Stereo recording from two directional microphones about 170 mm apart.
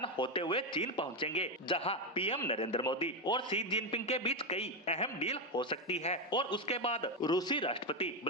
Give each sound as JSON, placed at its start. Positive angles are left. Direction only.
{"t": 0.0, "sound": "a man's voice", "side_deg": 30}